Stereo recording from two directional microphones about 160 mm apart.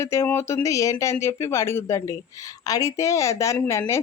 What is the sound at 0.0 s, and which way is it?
A woman's voice, 15° left (ahead or behind).